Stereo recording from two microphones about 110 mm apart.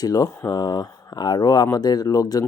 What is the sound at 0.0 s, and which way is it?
Speech, 30° left (ahead or behind).